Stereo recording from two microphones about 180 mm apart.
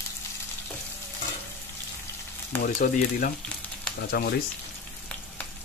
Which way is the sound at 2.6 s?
55° left (ahead or behind).